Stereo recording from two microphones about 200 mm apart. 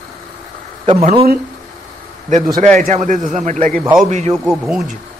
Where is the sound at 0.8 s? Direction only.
30° right (ahead or behind).